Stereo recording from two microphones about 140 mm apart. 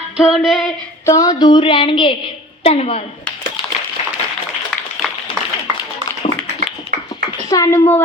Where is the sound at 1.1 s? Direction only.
25° left (ahead or behind).